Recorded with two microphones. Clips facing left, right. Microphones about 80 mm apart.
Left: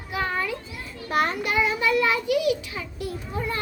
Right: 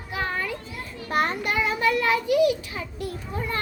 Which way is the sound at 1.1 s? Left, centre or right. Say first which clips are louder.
Left 1 dB; right.